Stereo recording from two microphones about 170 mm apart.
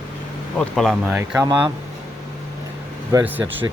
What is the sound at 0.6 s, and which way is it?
Speech, 5° left (ahead or behind).